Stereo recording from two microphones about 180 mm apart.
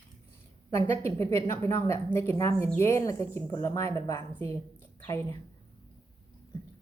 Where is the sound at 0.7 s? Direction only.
15° left (ahead or behind).